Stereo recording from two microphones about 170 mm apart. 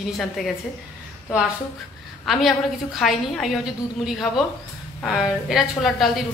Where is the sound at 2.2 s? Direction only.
Centre (ahead or behind).